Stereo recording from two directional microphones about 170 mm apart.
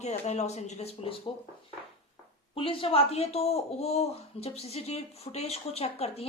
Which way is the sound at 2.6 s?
30° left (ahead or behind).